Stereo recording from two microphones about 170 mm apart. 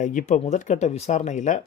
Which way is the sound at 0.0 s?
45° left (ahead or behind).